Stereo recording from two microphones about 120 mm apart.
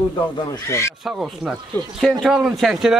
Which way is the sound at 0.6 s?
25° left (ahead or behind).